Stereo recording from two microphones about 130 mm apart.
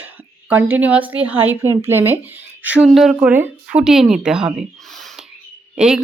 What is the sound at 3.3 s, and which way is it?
Speech, 10° right (ahead or behind).